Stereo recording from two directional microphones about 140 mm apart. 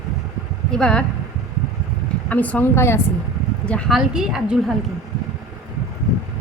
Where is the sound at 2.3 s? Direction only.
10° left (ahead or behind).